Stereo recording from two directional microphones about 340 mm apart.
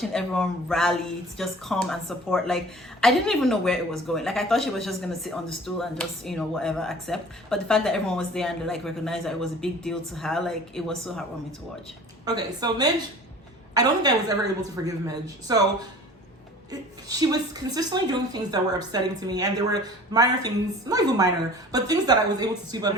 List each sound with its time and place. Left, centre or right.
0.1 s speech: centre
12.2 s a woman's voice: centre
17.1 s a woman's voice: centre